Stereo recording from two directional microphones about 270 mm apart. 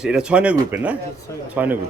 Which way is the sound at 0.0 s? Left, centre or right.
Centre.